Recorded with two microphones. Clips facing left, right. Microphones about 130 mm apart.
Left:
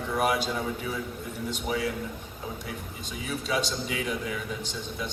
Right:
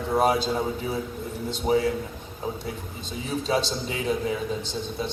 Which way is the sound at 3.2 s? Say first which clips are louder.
Right 4 dB; 35° right (ahead or behind).